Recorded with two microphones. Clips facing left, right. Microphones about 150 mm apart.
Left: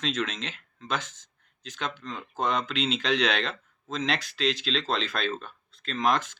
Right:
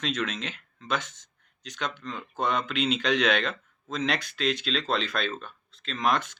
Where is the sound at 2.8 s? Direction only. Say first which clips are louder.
Right 2 dB; 30° left (ahead or behind).